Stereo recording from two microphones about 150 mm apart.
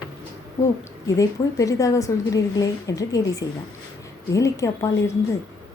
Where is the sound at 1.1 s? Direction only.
20° left (ahead or behind).